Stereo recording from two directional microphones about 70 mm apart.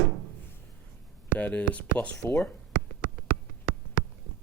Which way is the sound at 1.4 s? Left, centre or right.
Left.